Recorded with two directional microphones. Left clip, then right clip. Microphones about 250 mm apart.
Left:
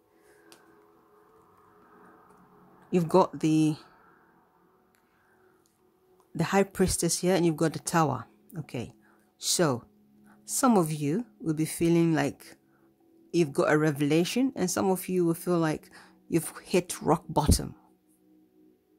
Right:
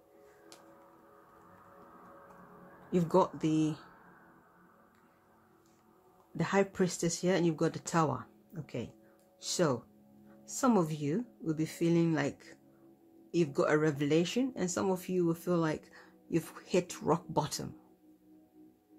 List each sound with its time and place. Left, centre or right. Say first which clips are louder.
2.9 s speech: left 5 dB; left
6.3 s speech: left 4 dB; left